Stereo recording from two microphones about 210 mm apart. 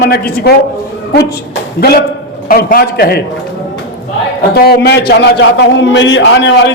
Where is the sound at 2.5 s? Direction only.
45° left (ahead or behind).